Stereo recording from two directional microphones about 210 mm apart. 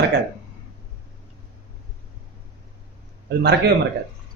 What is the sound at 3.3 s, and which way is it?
Speech, 50° right (ahead or behind).